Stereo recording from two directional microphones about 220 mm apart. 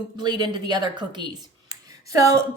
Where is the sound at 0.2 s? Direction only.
20° right (ahead or behind).